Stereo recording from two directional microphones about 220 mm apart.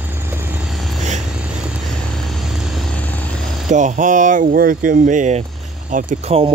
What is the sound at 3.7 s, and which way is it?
Speech, 35° right (ahead or behind).